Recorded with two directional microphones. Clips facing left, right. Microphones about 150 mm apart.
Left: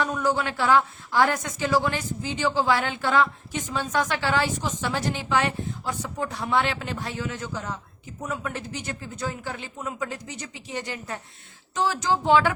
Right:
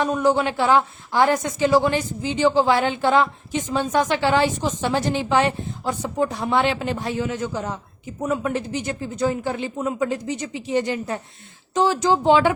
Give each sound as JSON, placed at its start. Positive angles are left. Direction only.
{"t": 0.0, "sound": "a woman's voice", "side_deg": -20}